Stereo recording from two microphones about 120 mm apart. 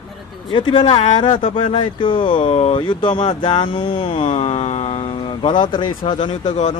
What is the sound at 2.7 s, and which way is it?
Speech, 40° left (ahead or behind).